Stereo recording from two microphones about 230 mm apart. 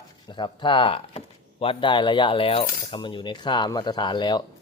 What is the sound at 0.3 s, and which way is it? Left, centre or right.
Speech, left.